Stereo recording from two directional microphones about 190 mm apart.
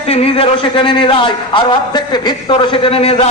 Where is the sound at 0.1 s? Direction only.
30° left (ahead or behind).